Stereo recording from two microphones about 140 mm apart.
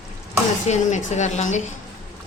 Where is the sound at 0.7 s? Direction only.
60° left (ahead or behind).